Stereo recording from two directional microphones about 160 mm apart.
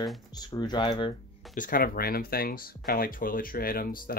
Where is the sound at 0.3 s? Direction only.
25° left (ahead or behind).